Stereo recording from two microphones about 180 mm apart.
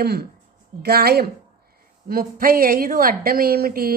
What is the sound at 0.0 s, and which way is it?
A woman's voice, 60° right (ahead or behind).